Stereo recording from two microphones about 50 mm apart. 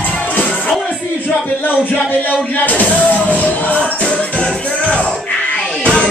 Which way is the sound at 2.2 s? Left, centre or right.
Left.